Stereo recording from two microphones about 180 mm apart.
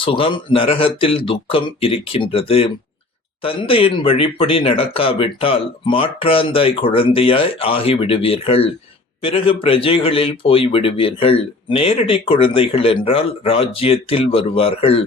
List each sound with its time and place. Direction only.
0.0 s a man's voice: 30° left (ahead or behind)